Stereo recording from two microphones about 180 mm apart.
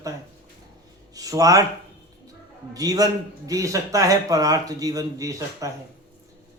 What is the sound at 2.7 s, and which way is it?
A man's voice, 20° right (ahead or behind).